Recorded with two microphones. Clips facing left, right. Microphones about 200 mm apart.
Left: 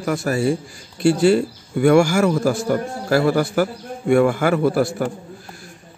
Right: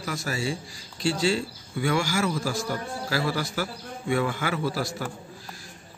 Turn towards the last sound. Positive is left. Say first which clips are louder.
# left 11 dB
turn(degrees=55)  # may be behind; listen again after turning